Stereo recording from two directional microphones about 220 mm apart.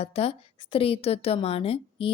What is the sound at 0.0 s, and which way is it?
A woman's voice, 25° left (ahead or behind).